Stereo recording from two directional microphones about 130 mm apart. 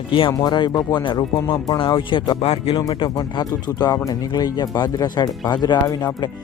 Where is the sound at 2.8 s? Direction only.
35° left (ahead or behind).